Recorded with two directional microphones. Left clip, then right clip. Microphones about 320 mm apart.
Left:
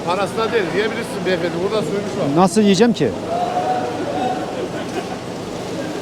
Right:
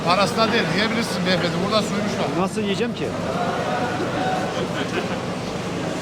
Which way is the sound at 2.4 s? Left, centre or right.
Left.